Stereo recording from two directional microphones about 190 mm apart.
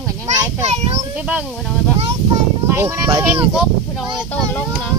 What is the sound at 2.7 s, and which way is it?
Speech, 15° right (ahead or behind).